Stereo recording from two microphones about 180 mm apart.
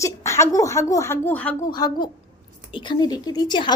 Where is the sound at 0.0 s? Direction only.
15° left (ahead or behind).